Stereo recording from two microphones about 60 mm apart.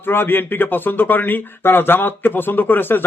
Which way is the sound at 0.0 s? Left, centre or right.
Left.